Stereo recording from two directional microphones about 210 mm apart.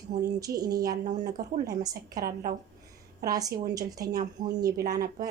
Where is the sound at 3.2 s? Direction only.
15° right (ahead or behind).